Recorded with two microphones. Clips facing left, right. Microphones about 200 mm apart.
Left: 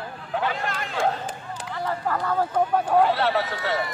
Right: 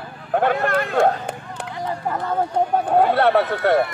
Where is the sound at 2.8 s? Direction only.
55° right (ahead or behind).